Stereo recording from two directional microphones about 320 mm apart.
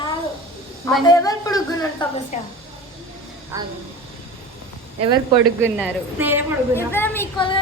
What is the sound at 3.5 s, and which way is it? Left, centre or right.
Speech, centre.